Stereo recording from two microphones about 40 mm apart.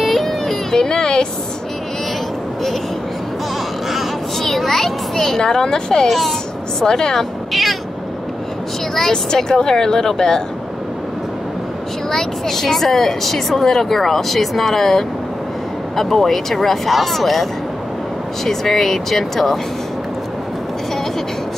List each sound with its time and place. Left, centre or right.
0.0 s a sound: centre
4.4 s a child's voice: centre
6.0 s speech: centre
6.8 s speech: centre
8.9 s speech: centre
12.1 s speech: centre